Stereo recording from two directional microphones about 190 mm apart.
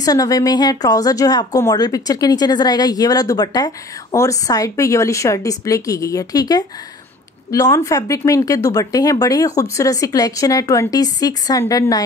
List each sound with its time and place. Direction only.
0.0 s a woman's voice: 20° left (ahead or behind)